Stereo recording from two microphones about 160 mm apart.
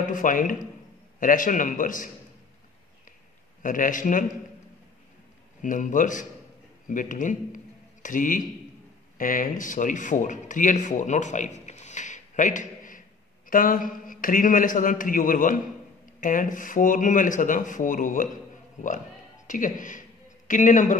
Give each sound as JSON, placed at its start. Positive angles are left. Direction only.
{"t": 0.0, "sound": "speech", "side_deg": 55}
{"t": 3.6, "sound": "speech", "side_deg": 55}
{"t": 5.6, "sound": "a man's voice", "side_deg": 55}
{"t": 19.4, "sound": "a man's voice", "side_deg": 55}